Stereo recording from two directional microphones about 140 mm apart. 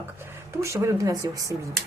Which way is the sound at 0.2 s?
20° right (ahead or behind).